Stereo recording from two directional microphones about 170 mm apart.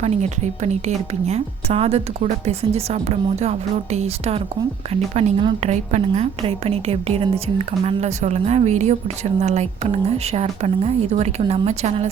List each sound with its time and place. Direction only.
0.0 s a woman's voice: 40° right (ahead or behind)